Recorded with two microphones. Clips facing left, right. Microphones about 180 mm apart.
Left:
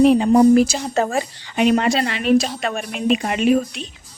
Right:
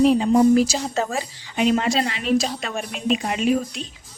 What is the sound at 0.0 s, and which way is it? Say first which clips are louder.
A woman's voice: left 3 dB; 60° left (ahead or behind).